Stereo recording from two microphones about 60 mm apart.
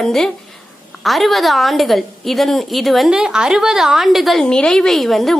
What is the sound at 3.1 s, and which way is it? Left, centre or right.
A woman's voice, centre.